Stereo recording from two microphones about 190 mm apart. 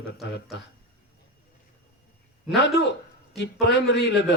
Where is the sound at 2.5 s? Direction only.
65° left (ahead or behind).